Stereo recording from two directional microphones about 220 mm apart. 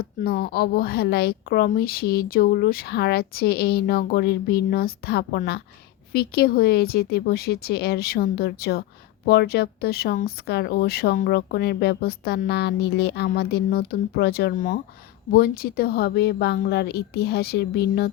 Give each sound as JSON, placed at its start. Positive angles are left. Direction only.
{"t": 0.0, "sound": "a woman's voice", "side_deg": 45}